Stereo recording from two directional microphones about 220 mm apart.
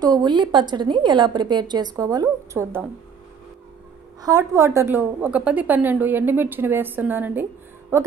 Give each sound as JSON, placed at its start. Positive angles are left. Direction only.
{"t": 0.0, "sound": "a woman's voice", "side_deg": -20}
{"t": 4.2, "sound": "a woman's voice", "side_deg": -15}